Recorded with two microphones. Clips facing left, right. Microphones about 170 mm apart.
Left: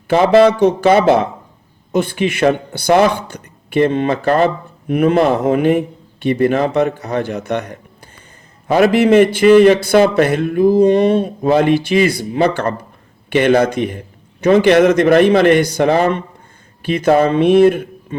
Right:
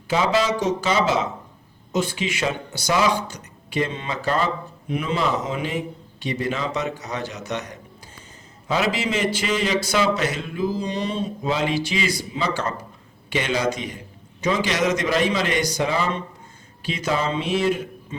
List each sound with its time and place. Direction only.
0.1 s speech: 60° left (ahead or behind)